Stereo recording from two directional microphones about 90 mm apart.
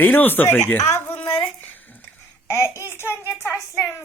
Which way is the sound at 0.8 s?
30° left (ahead or behind).